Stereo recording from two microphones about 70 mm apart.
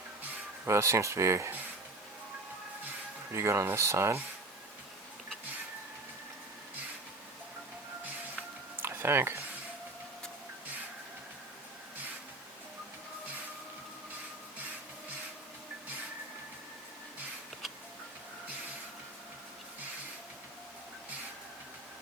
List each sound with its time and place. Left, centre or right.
0.6 s speech: right
3.3 s speech: right
8.8 s a sound: right